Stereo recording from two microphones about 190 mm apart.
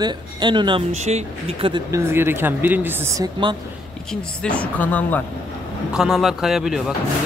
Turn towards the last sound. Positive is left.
turn(degrees=0)  # may be behind; listen again after turning